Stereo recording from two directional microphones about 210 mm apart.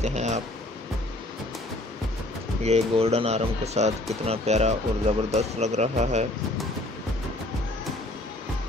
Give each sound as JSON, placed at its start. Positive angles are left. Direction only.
{"t": 0.0, "sound": "speech", "side_deg": -30}
{"t": 2.6, "sound": "speech", "side_deg": -30}